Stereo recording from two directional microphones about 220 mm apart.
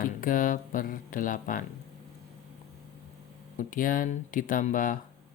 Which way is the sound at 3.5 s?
40° left (ahead or behind).